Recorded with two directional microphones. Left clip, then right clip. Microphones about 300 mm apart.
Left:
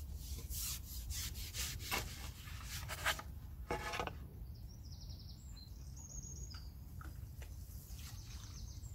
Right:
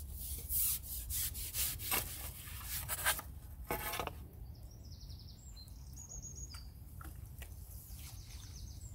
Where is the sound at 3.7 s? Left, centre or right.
Centre.